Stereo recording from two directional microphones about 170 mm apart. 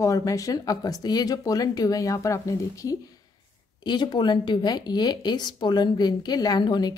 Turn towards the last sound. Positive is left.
turn(degrees=25)  # may be behind; listen again after turning